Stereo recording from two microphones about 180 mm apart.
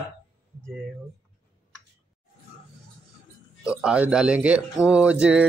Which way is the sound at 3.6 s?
5° right (ahead or behind).